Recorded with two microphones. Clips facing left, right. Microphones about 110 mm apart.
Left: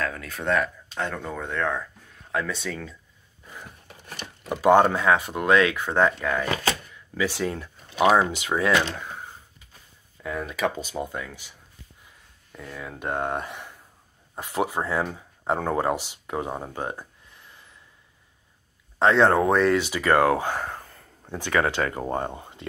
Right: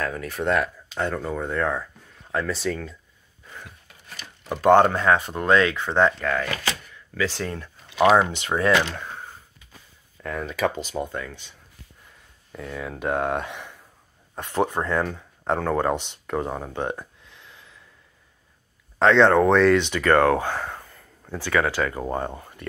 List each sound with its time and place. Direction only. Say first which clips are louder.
0.0 s speech: right 3 dB; 10° right (ahead or behind)
4.5 s speech: right 1 dB; 10° left (ahead or behind)
10.2 s speech: right 2 dB; 5° left (ahead or behind)
12.5 s speech: right 5 dB; centre (ahead or behind)
17.3 s a sound: right 2 dB; 90° right
18.9 s speech: right 2 dB; 5° left (ahead or behind)
20.6 s whispering: even; 30° left (ahead or behind)
21.2 s speech: right 1 dB; 20° left (ahead or behind)